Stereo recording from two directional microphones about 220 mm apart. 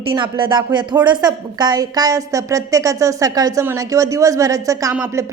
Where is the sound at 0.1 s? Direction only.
20° right (ahead or behind).